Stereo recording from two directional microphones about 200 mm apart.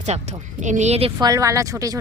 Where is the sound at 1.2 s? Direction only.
15° right (ahead or behind).